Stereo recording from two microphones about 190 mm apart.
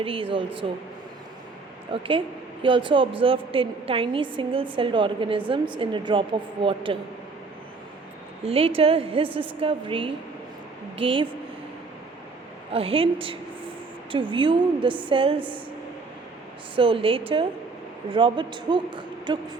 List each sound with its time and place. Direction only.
0.0 s a woman's voice: 30° right (ahead or behind)
1.9 s a woman's voice: 30° right (ahead or behind)
8.4 s a woman's voice: 30° right (ahead or behind)
12.7 s a woman's voice: 30° right (ahead or behind)
16.7 s a woman's voice: 30° right (ahead or behind)